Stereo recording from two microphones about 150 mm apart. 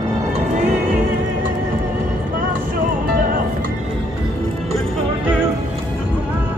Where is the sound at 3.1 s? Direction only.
65° right (ahead or behind).